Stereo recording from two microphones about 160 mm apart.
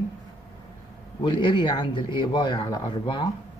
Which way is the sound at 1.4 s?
30° left (ahead or behind).